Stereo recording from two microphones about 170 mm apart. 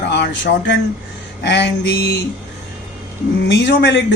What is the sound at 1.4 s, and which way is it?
Mantra, 85° left.